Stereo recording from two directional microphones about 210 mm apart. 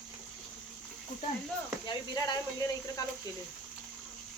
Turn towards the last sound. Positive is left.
turn(degrees=20)  # may be behind; listen again after turning